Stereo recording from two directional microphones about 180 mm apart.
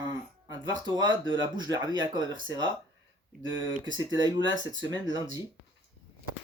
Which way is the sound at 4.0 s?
25° right (ahead or behind).